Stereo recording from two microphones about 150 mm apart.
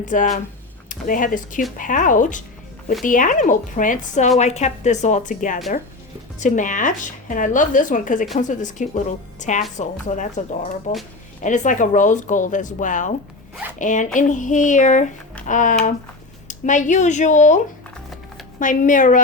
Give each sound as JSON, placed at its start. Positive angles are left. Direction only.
{"t": 0.0, "sound": "a woman's voice", "side_deg": 60}
{"t": 18.6, "sound": "speech", "side_deg": 60}